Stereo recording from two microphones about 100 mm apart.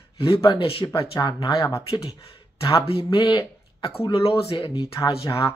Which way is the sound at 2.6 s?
65° left (ahead or behind).